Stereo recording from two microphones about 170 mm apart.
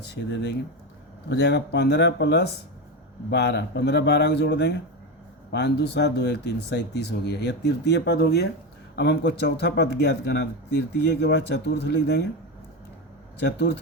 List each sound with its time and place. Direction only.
1.3 s speech: 80° left
9.0 s speech: 90° left
13.4 s speech: 90° left